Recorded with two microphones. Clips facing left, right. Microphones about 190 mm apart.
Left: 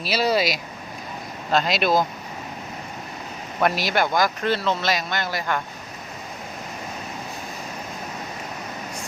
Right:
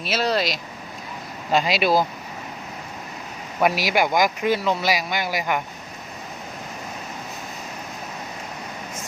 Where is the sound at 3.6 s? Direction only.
10° right (ahead or behind).